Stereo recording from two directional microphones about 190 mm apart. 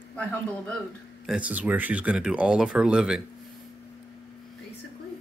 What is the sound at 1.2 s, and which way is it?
Speech, 5° right (ahead or behind).